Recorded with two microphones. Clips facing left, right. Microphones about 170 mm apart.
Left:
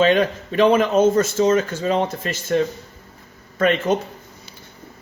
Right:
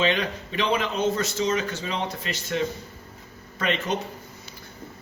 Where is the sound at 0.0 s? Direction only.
45° left (ahead or behind).